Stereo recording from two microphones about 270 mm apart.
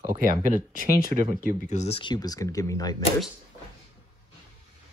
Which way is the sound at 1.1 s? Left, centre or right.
Right.